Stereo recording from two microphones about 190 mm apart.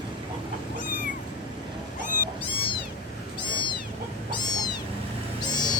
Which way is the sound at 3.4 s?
25° left (ahead or behind).